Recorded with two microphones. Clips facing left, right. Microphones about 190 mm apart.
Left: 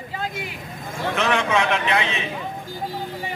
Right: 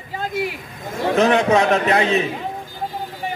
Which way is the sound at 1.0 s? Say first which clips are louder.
Right 7 dB; 35° right (ahead or behind).